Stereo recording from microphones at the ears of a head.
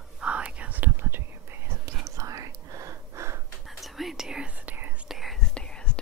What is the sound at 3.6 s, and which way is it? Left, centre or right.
Whispering, centre.